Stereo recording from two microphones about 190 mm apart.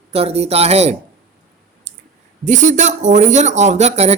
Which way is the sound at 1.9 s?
40° right (ahead or behind).